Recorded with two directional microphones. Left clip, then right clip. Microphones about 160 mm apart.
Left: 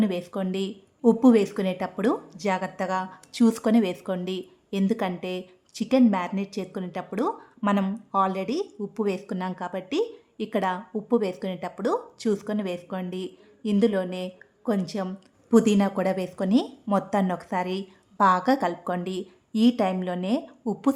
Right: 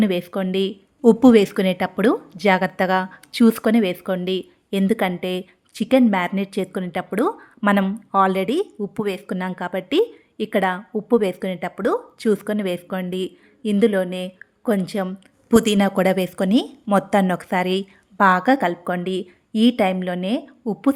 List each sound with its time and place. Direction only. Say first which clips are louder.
0.0 s a woman's voice: right 6 dB; 20° right (ahead or behind)